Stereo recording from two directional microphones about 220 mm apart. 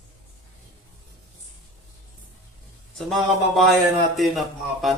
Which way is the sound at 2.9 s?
Centre (ahead or behind).